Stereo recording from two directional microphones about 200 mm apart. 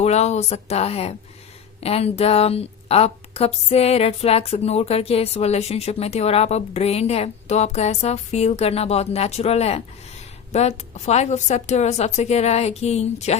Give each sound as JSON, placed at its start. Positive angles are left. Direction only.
{"t": 0.0, "sound": "a woman's voice", "side_deg": 35}